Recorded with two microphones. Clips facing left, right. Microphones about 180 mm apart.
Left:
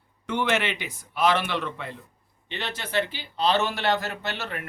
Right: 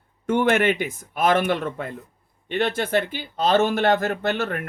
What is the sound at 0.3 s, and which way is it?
Speech, 50° right (ahead or behind).